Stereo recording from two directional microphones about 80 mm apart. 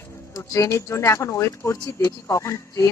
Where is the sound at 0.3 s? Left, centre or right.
Left.